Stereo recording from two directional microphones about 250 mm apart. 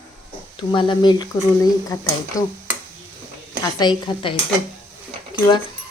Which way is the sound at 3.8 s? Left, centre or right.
Centre.